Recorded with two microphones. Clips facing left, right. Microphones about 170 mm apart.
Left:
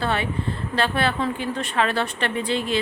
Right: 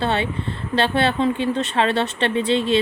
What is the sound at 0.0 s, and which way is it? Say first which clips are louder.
A woman's voice: right 2 dB; 25° right (ahead or behind).